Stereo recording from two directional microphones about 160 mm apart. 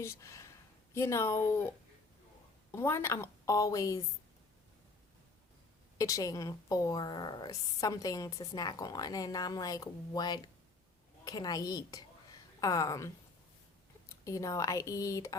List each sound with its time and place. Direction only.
0.0 s a sound: 20° left (ahead or behind)
0.9 s speech: 20° left (ahead or behind)
2.7 s a woman's voice: 15° left (ahead or behind)
6.0 s a woman's voice: 20° left (ahead or behind)
14.3 s a woman's voice: 20° left (ahead or behind)